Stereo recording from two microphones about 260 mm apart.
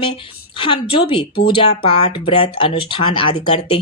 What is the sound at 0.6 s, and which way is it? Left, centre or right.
Speech, left.